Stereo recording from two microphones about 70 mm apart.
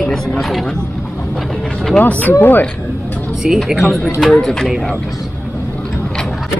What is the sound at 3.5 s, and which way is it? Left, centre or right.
Speech, centre.